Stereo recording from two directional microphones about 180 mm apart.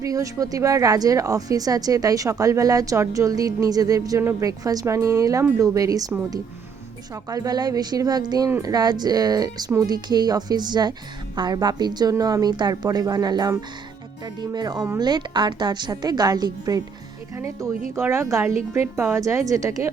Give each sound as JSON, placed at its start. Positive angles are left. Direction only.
{"t": 0.0, "sound": "a woman's voice", "side_deg": -20}
{"t": 7.3, "sound": "a woman's voice", "side_deg": -20}